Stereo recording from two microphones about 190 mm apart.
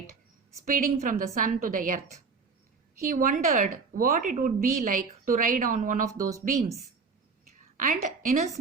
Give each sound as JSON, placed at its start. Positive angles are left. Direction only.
{"t": 0.6, "sound": "a woman's voice", "side_deg": -45}
{"t": 3.1, "sound": "a woman's voice", "side_deg": -45}
{"t": 7.8, "sound": "a woman's voice", "side_deg": -45}